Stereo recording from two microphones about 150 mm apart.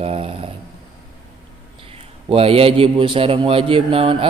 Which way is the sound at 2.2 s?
40° right (ahead or behind).